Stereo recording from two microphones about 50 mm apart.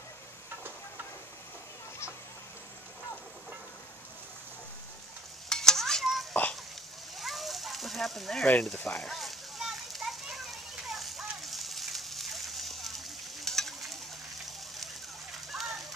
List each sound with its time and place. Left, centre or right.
5.5 s stir: centre
6.4 s a sound: left
7.2 s a sound: centre
8.6 s speech: centre
9.1 s children playing: centre
15.5 s fire: centre